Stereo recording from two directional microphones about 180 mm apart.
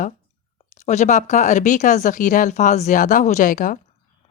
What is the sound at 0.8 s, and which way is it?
Speech, 40° left (ahead or behind).